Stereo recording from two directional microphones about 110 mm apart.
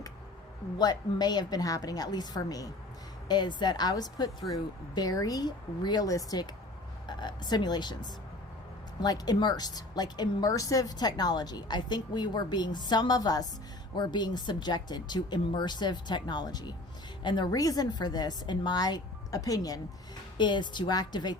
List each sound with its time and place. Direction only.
0.8 s speech: 40° left (ahead or behind)
9.0 s speech: 35° left (ahead or behind)
20.4 s speech: 45° left (ahead or behind)